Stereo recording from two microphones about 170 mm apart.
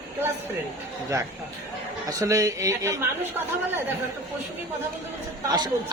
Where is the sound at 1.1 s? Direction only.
20° right (ahead or behind).